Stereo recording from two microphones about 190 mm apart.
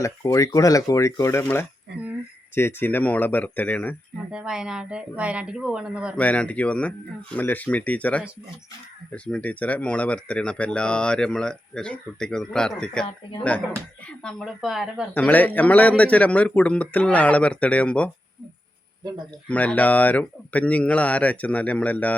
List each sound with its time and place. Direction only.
0.0 s speech: 15° left (ahead or behind)
1.9 s speech: 60° right (ahead or behind)
2.6 s speech: 10° left (ahead or behind)
4.3 s speech: 5° right (ahead or behind)
6.1 s speech: 5° left (ahead or behind)
14.2 s speech: 5° left (ahead or behind)
19.5 s speech: 5° left (ahead or behind)